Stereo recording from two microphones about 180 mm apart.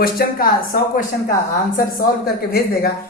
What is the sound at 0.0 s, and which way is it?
Speech, 55° left (ahead or behind).